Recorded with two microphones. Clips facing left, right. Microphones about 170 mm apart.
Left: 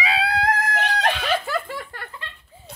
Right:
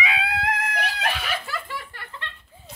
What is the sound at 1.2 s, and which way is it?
Giggle, 50° left (ahead or behind).